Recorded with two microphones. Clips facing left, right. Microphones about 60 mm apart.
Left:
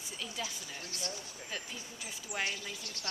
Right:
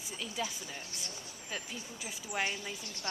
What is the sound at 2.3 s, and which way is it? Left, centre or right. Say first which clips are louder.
Speech: right 2 dB; centre.